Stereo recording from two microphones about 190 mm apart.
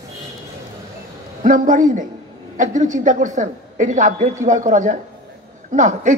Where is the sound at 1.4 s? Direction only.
45° right (ahead or behind).